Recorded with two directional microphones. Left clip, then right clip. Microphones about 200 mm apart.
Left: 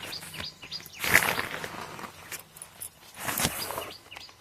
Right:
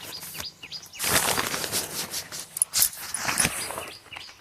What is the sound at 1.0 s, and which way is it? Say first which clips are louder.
Bird flight: left 3 dB; 30° right (ahead or behind).